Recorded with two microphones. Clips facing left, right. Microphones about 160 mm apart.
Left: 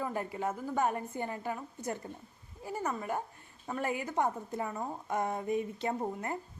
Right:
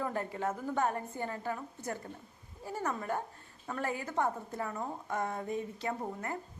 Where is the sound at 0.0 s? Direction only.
10° left (ahead or behind).